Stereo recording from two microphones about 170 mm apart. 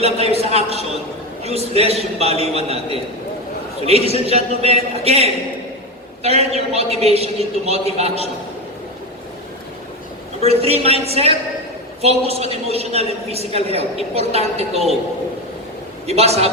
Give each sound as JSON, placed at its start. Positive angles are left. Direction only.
{"t": 0.0, "sound": "a woman's voice", "side_deg": -35}
{"t": 10.4, "sound": "a woman's voice", "side_deg": -35}
{"t": 16.0, "sound": "a woman's voice", "side_deg": -35}